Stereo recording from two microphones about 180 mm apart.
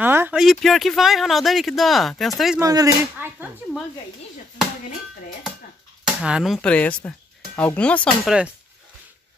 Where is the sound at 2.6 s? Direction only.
20° right (ahead or behind).